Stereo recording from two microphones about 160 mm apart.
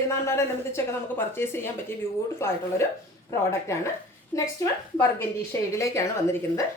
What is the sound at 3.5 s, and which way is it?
Speech, 15° left (ahead or behind).